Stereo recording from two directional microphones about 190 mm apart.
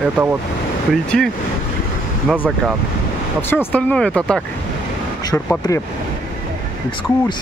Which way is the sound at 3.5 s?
10° left (ahead or behind).